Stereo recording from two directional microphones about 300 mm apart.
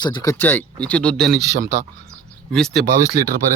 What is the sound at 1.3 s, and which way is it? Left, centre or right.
Speech, right.